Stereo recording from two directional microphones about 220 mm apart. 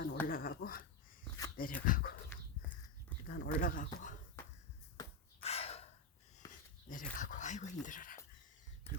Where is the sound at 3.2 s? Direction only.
45° left (ahead or behind).